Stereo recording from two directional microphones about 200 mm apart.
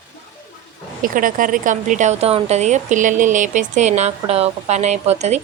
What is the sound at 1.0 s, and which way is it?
A woman's voice, 45° right (ahead or behind).